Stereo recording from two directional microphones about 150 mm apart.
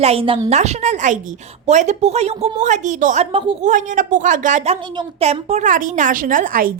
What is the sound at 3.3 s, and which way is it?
Speech, 35° right (ahead or behind).